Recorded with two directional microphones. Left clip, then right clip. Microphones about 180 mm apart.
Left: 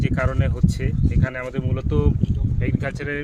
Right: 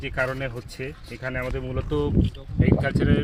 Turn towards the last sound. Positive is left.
turn(degrees=-5)  # may be behind; listen again after turning